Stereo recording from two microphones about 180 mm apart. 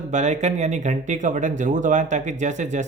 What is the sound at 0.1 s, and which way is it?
Speech, 40° right (ahead or behind).